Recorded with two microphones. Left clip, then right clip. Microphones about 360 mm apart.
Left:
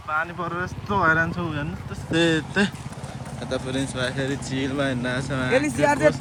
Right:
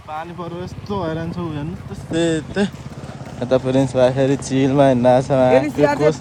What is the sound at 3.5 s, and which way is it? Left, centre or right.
Speech, centre.